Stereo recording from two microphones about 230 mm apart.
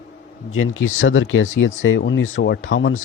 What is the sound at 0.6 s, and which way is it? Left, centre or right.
Speech, left.